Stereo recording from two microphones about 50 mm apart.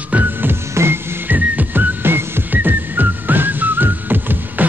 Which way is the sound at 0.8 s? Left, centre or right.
Right.